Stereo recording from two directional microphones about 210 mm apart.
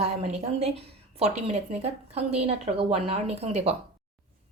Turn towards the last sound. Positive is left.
turn(degrees=-30)  # may be behind; listen again after turning